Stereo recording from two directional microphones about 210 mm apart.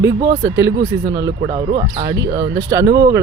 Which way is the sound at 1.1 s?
20° right (ahead or behind).